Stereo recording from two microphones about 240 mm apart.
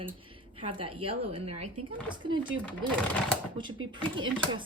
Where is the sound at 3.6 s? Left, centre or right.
Centre.